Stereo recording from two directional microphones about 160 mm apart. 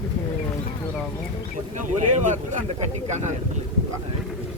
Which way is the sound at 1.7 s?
55° right (ahead or behind).